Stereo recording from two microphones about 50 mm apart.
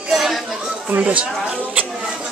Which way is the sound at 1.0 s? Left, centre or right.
Right.